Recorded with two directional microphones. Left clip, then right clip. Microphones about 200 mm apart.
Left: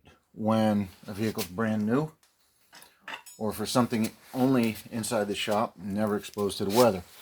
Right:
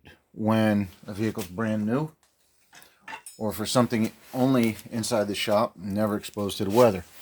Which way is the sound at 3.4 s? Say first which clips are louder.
Right 3 dB; 25° right (ahead or behind).